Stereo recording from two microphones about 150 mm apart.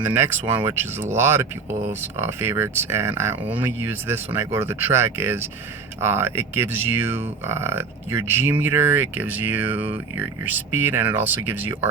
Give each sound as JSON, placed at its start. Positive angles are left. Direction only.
{"t": 0.0, "sound": "speech", "side_deg": -15}